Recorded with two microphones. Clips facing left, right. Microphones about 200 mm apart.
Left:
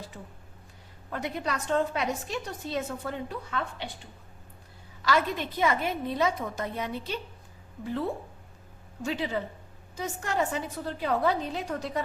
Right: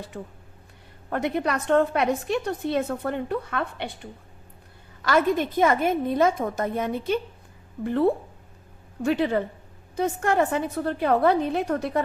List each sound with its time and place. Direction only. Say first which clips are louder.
0.1 s a woman's voice: right 8 dB; 55° right (ahead or behind)
5.0 s a woman's voice: right 6 dB; 50° right (ahead or behind)
7.9 s a woman's voice: right 9 dB; 60° right (ahead or behind)